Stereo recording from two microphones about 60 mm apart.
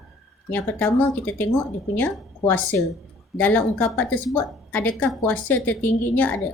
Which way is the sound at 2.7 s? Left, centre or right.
Left.